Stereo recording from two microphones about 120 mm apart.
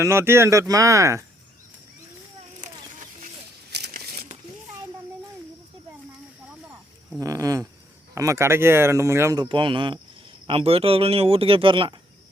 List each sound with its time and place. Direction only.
0.0 s speech: 20° right (ahead or behind)
2.6 s a sound: 90° right
7.2 s speech: 30° right (ahead or behind)
9.4 s speech: 40° right (ahead or behind)